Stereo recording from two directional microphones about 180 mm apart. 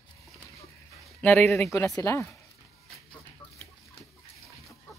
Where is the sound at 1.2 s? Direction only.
10° left (ahead or behind).